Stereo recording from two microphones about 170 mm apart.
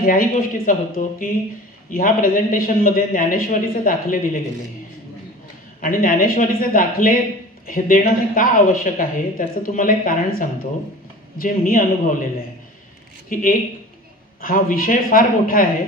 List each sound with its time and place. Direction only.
0.0 s speech: 55° left (ahead or behind)
5.8 s speech: 55° left (ahead or behind)
13.3 s speech: 55° left (ahead or behind)